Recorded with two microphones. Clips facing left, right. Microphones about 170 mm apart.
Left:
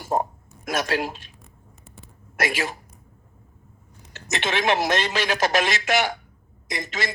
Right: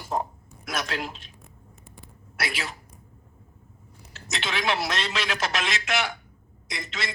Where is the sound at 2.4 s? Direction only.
45° left (ahead or behind).